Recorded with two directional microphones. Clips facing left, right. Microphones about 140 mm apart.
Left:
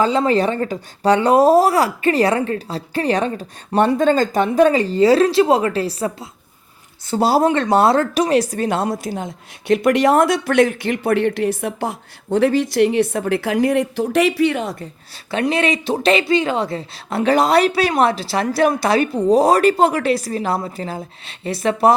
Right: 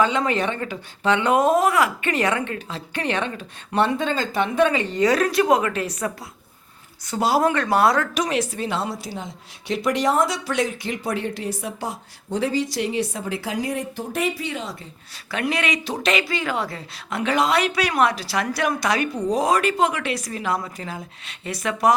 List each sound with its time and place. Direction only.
0.0 s speech: 35° left (ahead or behind); by 14.8 s 50° left (ahead or behind)
15.3 s speech: 30° left (ahead or behind)